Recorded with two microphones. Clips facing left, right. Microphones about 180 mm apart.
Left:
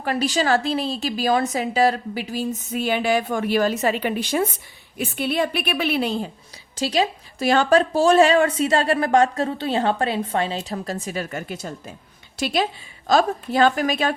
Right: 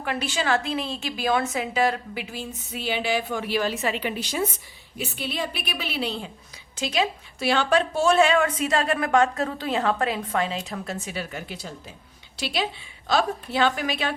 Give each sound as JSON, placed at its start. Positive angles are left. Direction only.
{"t": 0.0, "sound": "a woman's voice", "side_deg": 35}